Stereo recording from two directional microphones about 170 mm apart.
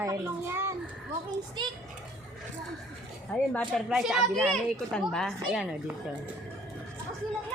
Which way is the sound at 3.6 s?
5° right (ahead or behind).